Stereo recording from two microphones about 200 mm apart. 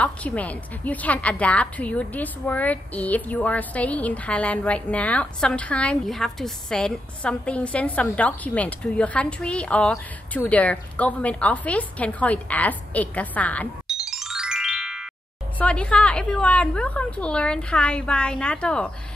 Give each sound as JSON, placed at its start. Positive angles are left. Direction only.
{"t": 0.0, "sound": "a woman's voice", "side_deg": 5}